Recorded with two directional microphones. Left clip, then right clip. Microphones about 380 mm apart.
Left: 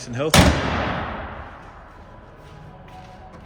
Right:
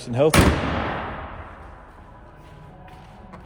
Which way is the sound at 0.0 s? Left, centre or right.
Centre.